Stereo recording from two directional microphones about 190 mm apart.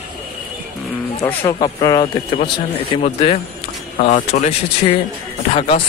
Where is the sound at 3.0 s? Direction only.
35° left (ahead or behind).